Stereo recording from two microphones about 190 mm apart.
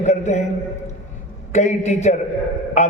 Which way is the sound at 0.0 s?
35° left (ahead or behind).